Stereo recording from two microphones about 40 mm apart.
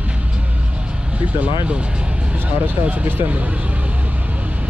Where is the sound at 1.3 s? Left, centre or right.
Right.